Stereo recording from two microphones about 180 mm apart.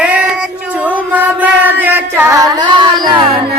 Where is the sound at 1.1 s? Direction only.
10° right (ahead or behind); by 3.3 s 30° right (ahead or behind).